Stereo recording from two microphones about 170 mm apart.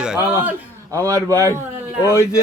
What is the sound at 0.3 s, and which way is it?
Speech, 10° right (ahead or behind).